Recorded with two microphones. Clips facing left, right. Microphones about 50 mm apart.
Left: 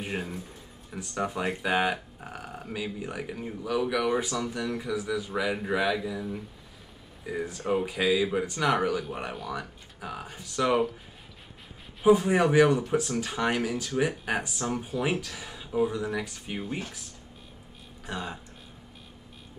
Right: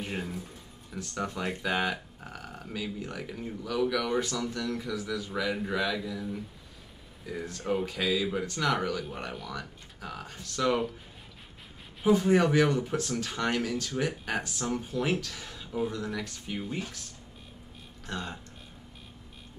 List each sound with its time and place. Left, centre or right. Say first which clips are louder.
0.0 s speech: left 2 dB; centre
12.1 s speech: left 2 dB; centre
18.0 s speech: left 2 dB; centre